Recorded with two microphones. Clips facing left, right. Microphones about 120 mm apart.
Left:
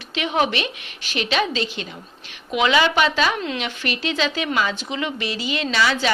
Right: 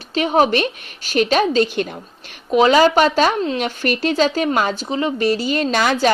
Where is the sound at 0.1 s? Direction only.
40° right (ahead or behind).